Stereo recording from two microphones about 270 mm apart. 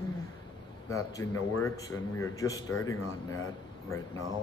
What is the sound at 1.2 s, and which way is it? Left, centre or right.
A man's voice, centre.